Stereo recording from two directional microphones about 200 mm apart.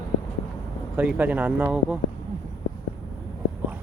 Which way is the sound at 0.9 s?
10° right (ahead or behind).